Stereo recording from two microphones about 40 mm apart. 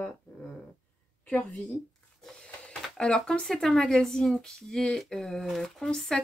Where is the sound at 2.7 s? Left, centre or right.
Left.